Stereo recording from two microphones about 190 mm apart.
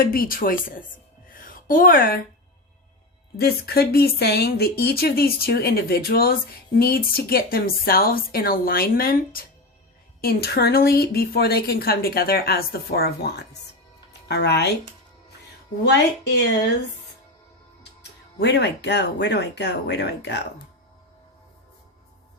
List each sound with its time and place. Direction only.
0.0 s speech: 50° left (ahead or behind)
1.3 s a sound: 45° left (ahead or behind)
3.3 s a woman's voice: 55° left (ahead or behind)
18.3 s a woman's voice: 65° left (ahead or behind)